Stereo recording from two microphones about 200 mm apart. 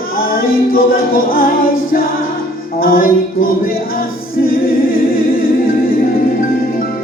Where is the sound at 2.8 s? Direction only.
45° left (ahead or behind).